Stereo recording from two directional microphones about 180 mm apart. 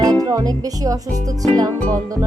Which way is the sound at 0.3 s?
20° right (ahead or behind).